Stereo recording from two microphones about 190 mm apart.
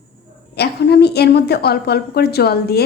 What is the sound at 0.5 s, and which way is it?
A woman's voice, 60° left (ahead or behind).